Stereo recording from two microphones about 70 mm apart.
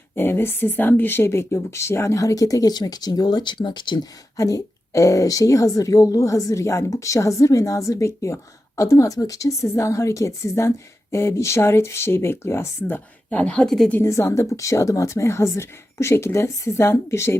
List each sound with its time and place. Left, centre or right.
0.2 s a woman's voice: left
4.4 s a woman's voice: left
13.3 s speech: centre
13.7 s a woman's voice: centre
14.0 s a woman's voice: left